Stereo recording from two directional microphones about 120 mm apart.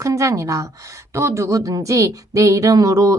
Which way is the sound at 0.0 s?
25° right (ahead or behind).